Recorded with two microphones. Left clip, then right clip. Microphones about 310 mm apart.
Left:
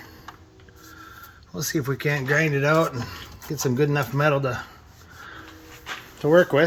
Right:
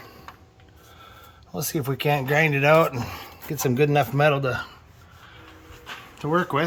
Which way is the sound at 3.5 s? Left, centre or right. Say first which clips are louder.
Even; centre.